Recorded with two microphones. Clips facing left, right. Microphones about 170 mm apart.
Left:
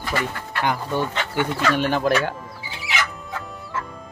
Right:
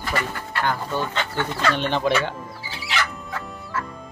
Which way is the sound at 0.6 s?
15° left (ahead or behind).